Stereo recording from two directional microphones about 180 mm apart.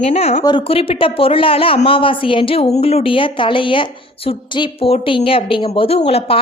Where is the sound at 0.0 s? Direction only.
35° left (ahead or behind).